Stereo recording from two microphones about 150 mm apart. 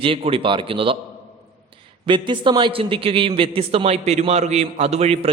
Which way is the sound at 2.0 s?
30° right (ahead or behind).